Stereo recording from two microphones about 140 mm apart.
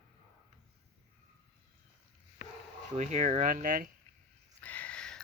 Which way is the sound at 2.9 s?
60° right (ahead or behind).